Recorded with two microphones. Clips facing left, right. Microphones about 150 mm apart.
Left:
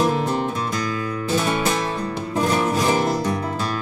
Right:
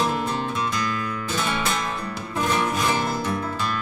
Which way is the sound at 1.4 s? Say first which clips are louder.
Left 2 dB; 40° left (ahead or behind).